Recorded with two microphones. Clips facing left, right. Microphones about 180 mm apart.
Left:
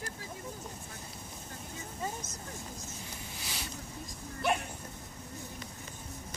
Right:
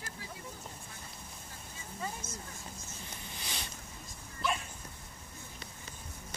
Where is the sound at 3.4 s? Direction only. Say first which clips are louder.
Even; 5° left (ahead or behind).